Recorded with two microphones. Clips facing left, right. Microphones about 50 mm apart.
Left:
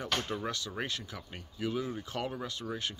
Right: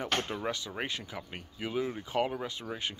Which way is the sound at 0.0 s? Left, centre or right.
Right.